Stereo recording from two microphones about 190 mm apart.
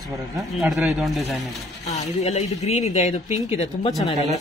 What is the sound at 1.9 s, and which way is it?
Speech, 35° left (ahead or behind).